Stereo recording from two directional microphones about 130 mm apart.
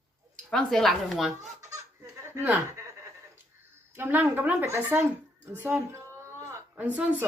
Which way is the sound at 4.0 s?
15° right (ahead or behind).